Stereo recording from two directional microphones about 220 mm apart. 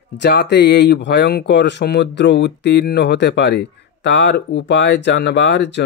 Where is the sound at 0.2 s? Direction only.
50° left (ahead or behind).